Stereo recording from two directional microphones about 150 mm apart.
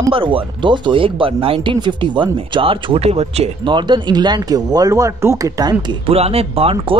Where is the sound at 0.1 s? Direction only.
35° right (ahead or behind).